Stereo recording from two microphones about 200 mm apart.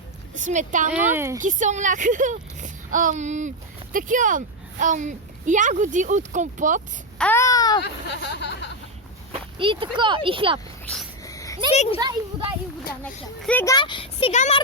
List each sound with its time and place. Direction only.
0.3 s speech: 40° right (ahead or behind)
1.1 s speech: 15° right (ahead or behind)
1.4 s speech: 40° right (ahead or behind)
7.2 s speech: 10° left (ahead or behind)
7.8 s speech: 60° left (ahead or behind)
9.3 s speech: 25° right (ahead or behind)
10.8 s a sound: centre (ahead or behind)
11.2 s a sound: 15° left (ahead or behind)
11.7 s a child's voice: 30° left (ahead or behind)
11.9 s speech: 20° right (ahead or behind)
13.0 s a child's voice: 10° left (ahead or behind)
13.7 s a child's voice: 25° left (ahead or behind)